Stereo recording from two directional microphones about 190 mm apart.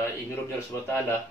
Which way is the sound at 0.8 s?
15° left (ahead or behind).